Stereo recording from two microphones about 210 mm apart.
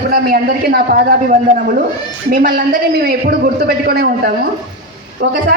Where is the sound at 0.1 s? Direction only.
45° right (ahead or behind).